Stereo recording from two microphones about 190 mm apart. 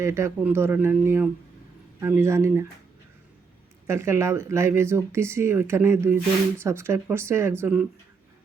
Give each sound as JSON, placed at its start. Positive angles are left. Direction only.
{"t": 0.0, "sound": "speech", "side_deg": -15}
{"t": 3.8, "sound": "speech", "side_deg": -15}